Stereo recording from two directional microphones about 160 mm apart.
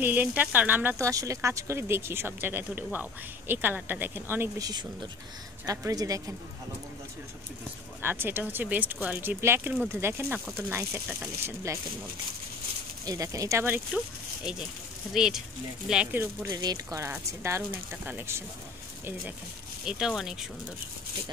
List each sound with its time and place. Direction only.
0.0 s speech: 10° right (ahead or behind)
8.0 s speech: 15° right (ahead or behind)
13.0 s speech: 20° right (ahead or behind)
16.4 s speech: 25° right (ahead or behind)
19.8 s speech: 5° right (ahead or behind)